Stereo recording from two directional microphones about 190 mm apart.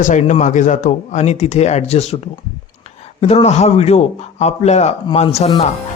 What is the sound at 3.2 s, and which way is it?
A man's voice, 35° left (ahead or behind).